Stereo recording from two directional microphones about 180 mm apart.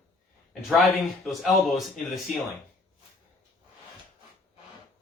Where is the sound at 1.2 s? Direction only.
Centre (ahead or behind).